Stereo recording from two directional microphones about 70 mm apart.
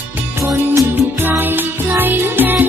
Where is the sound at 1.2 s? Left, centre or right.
Right.